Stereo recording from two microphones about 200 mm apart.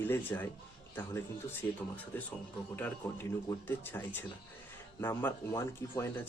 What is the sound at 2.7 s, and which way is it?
Speech, 10° left (ahead or behind).